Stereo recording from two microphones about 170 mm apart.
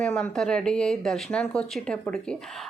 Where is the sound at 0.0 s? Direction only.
5° left (ahead or behind).